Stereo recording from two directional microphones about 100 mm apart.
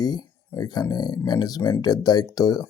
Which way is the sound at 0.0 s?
40° left (ahead or behind).